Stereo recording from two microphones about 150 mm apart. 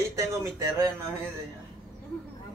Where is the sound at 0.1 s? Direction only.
20° right (ahead or behind).